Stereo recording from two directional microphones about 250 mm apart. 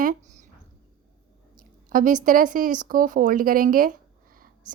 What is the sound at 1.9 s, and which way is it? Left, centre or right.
A woman's voice, right.